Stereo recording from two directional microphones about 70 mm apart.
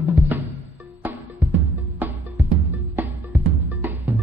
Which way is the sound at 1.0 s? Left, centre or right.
Right.